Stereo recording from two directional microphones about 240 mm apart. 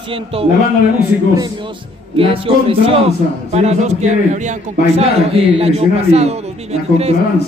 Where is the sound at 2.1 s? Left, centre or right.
Right.